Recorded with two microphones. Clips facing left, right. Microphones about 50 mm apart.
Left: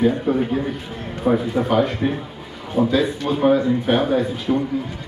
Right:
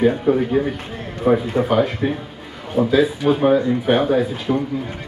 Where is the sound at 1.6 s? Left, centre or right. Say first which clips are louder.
Right 1 dB; centre.